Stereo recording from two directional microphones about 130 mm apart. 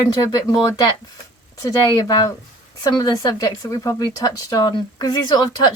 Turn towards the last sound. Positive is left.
turn(degrees=30)  # may be behind; listen again after turning